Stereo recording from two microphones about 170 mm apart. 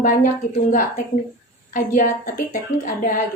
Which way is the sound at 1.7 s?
50° left (ahead or behind).